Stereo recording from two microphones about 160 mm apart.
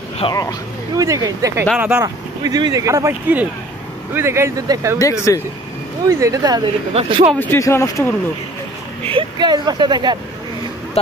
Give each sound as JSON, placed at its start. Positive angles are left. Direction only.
{"t": 0.2, "sound": "speech", "side_deg": 25}
{"t": 0.9, "sound": "speech", "side_deg": -20}
{"t": 4.9, "sound": "speech", "side_deg": 20}
{"t": 6.0, "sound": "speech", "side_deg": -20}
{"t": 6.9, "sound": "a man's voice", "side_deg": -35}
{"t": 7.3, "sound": "speech", "side_deg": 15}
{"t": 9.0, "sound": "speech", "side_deg": -30}